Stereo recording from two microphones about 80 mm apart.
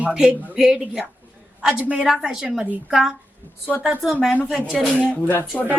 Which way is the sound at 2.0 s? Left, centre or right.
Centre.